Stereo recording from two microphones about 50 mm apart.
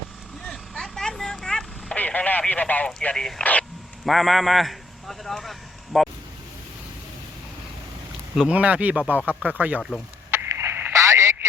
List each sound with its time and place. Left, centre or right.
0.5 s vehicle: centre
2.0 s vehicle: left
2.5 s speech: left
3.2 s speech: centre
3.4 s speech: left
4.0 s a man's voice: centre
8.4 s speech: right
10.3 s a sound: right
10.9 s a sound: right